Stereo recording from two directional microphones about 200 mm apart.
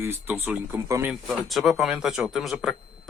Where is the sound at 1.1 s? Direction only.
Centre (ahead or behind).